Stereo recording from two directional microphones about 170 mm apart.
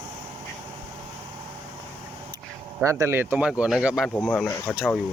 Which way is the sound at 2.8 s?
15° right (ahead or behind).